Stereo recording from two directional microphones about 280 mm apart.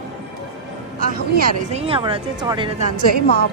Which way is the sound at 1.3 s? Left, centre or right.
Right.